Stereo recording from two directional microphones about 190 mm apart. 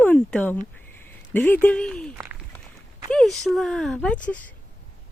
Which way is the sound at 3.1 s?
Centre (ahead or behind).